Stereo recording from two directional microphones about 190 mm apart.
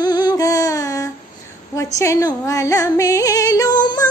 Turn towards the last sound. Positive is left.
turn(degrees=20)  # may be behind; listen again after turning